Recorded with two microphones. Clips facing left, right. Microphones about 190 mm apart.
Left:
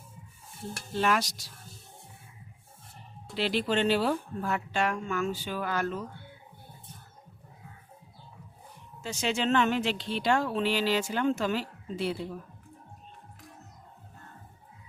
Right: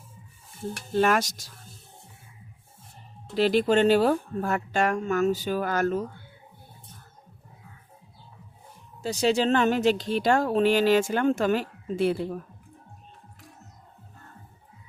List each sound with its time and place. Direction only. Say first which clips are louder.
0.9 s speech: right 5 dB; 50° right (ahead or behind)
3.3 s speech: right 7 dB; 45° right (ahead or behind)
9.0 s speech: right 6 dB; 35° right (ahead or behind); by 12.4 s 50° right (ahead or behind)